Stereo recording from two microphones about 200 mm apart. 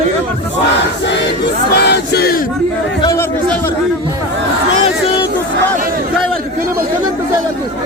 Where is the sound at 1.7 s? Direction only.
50° left (ahead or behind).